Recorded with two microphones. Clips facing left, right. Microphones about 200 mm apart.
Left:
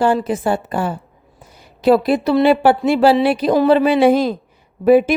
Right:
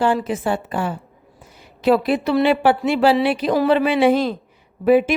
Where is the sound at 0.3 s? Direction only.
40° left (ahead or behind).